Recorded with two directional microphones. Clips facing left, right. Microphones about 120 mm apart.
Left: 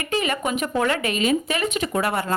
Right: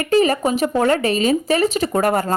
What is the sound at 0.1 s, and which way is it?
A woman's voice, 35° right (ahead or behind).